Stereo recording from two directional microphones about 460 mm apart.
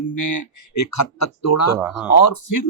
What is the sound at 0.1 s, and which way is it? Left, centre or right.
A man's voice, left.